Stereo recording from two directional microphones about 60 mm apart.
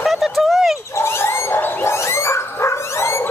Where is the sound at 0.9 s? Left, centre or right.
Left.